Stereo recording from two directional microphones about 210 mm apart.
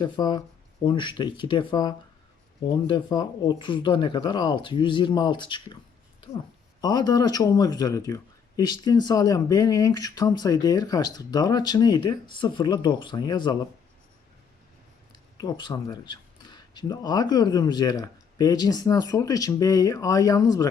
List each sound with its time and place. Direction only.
0.0 s speech: 20° left (ahead or behind)
6.8 s speech: 20° left (ahead or behind)
15.4 s speech: 20° left (ahead or behind)